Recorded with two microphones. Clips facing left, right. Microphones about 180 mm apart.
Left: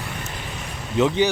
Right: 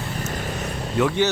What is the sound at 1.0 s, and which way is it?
Speech, 20° left (ahead or behind).